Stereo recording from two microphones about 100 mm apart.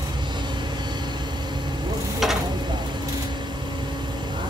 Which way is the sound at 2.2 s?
Centre (ahead or behind).